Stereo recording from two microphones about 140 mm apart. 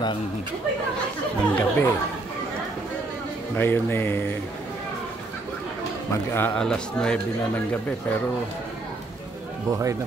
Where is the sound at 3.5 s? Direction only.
15° left (ahead or behind).